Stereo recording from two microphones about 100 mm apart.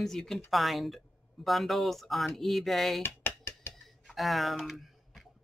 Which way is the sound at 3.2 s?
20° left (ahead or behind).